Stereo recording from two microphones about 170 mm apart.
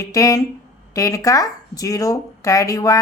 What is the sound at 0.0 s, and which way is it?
Speech, 20° left (ahead or behind).